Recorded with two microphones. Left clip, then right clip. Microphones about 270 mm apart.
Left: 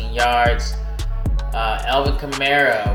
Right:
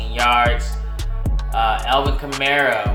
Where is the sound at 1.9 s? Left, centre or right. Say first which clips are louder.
Right 1 dB; centre.